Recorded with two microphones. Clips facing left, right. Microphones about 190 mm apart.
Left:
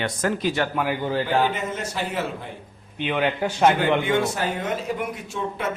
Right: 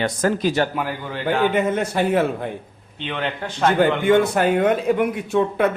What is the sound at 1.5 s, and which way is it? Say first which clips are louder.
Speech: right 8 dB; 60° right (ahead or behind).